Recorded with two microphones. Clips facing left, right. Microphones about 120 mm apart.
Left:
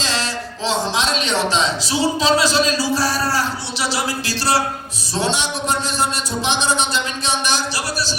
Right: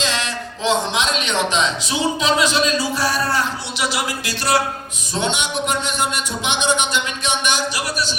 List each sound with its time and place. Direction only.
0.0 s a man's voice: 35° left (ahead or behind)